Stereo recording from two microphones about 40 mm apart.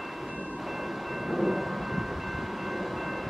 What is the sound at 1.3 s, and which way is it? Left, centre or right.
Thunder, centre.